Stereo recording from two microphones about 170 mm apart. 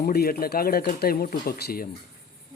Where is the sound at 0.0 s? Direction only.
65° left (ahead or behind).